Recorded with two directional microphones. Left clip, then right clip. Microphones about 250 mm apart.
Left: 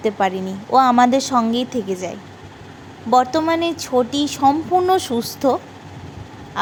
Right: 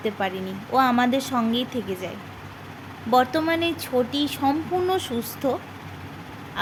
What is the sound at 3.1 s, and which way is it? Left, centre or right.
A woman's voice, centre.